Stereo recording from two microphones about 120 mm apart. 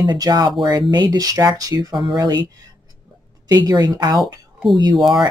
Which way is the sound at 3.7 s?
35° right (ahead or behind).